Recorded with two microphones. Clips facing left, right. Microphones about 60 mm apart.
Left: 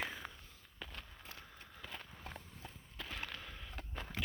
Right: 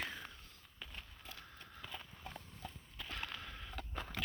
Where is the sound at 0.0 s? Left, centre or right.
Centre.